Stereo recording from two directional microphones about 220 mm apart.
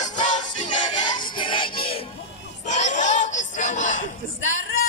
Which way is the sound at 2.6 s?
35° left (ahead or behind).